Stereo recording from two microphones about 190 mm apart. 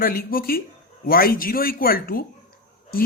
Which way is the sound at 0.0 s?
50° left (ahead or behind).